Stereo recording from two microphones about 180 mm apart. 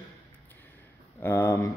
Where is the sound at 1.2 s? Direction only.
15° left (ahead or behind).